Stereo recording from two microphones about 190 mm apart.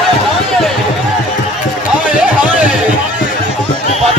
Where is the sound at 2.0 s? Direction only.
10° right (ahead or behind).